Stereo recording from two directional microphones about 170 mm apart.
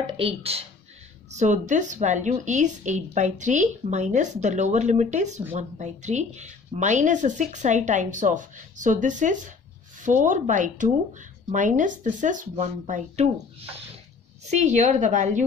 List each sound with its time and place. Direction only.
0.2 s speech: 35° right (ahead or behind)
14.5 s speech: 45° right (ahead or behind)